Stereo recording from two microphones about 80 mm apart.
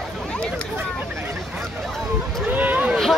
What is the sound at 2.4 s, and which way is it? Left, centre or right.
Boat, right.